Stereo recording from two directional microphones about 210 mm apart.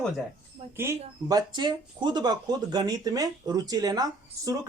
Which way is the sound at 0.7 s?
15° right (ahead or behind).